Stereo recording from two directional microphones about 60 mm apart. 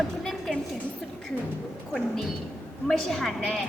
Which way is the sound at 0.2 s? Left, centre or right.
Centre.